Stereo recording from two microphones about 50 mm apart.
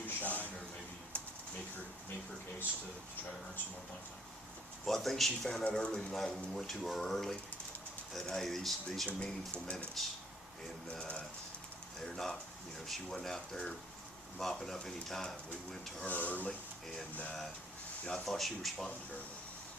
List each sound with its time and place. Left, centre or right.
0.2 s a sound: left
1.1 s typewriter: left
4.9 s speech: centre
5.7 s speech: centre
6.5 s speech: centre
8.4 s speech: centre
9.1 s speech: centre
10.0 s speech: centre
10.9 s speech: left
11.9 s speech: centre
16.0 s speech: left
18.1 s speech: centre